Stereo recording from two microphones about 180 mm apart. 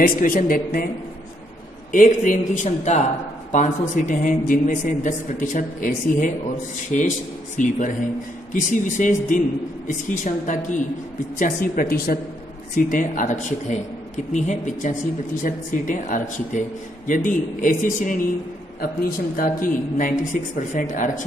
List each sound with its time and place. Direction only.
0.0 s a woman's voice: 50° left (ahead or behind)
1.9 s a woman's voice: 45° left (ahead or behind)
19.3 s a woman's voice: 50° left (ahead or behind)